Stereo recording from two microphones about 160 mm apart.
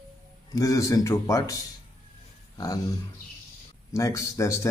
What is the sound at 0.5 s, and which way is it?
A man's voice, 20° left (ahead or behind).